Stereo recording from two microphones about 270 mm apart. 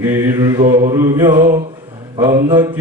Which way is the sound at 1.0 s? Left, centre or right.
Centre.